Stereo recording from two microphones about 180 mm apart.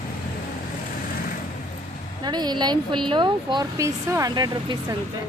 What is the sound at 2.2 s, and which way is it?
Speech, 25° right (ahead or behind).